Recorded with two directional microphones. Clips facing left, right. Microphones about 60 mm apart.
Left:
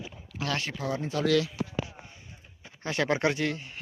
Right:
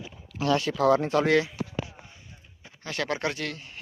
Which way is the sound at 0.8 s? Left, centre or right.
Right.